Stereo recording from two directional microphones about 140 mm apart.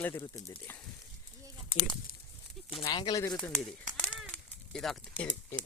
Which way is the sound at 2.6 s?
35° left (ahead or behind).